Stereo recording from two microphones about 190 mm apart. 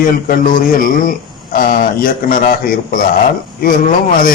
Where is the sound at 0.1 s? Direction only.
45° left (ahead or behind).